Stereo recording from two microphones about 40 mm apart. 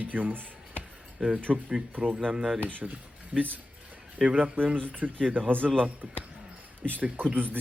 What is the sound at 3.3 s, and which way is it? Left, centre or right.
Speech, right.